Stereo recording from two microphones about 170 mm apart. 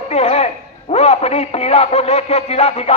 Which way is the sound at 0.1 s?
40° left (ahead or behind).